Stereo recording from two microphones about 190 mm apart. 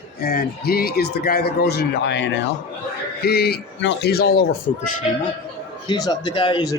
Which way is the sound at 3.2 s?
55° left (ahead or behind).